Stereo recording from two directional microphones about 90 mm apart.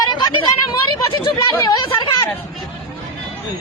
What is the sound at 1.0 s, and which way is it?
Speech, 70° left (ahead or behind).